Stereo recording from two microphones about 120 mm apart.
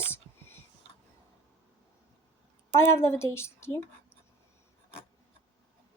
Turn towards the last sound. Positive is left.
turn(degrees=20)  # may be behind; listen again after turning